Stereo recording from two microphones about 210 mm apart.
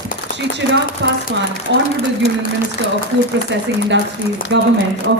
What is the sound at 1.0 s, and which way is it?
Speech, 60° right (ahead or behind).